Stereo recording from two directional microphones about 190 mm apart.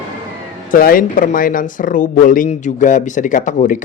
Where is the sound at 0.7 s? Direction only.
50° left (ahead or behind).